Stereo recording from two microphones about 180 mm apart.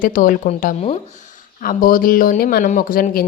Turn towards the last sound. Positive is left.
turn(degrees=50)  # may be behind; listen again after turning